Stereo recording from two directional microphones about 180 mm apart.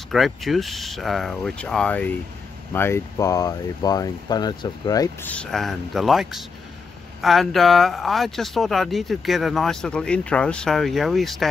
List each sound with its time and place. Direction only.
0.1 s speech: centre (ahead or behind); by 5.3 s 20° left (ahead or behind)
5.3 s speech: 5° left (ahead or behind)